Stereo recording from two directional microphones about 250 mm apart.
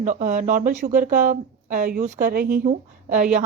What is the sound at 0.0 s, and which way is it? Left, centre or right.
Speech, right.